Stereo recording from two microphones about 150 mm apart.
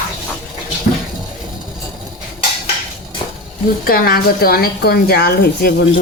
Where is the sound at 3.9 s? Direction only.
85° left.